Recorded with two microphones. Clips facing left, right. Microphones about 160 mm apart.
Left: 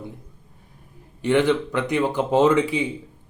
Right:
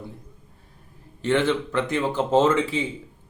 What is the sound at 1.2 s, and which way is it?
A man's voice, 15° left (ahead or behind).